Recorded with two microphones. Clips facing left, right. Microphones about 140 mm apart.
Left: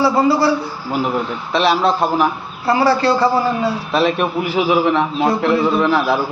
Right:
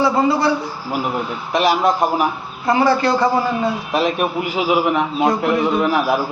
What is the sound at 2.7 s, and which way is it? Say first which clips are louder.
Speech: left 1 dB; 35° left (ahead or behind).